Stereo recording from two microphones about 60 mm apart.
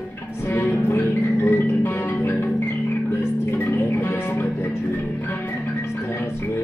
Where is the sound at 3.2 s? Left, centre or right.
Left.